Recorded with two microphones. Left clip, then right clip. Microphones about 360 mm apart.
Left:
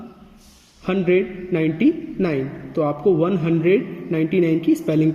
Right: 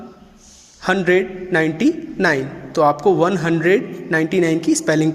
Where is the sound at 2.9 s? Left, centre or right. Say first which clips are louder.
Right 3 dB; centre.